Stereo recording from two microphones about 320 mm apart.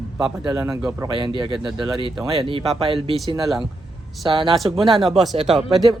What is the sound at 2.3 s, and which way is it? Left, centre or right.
Speech, centre.